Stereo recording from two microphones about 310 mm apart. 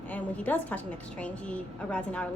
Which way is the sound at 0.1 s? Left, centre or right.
Centre.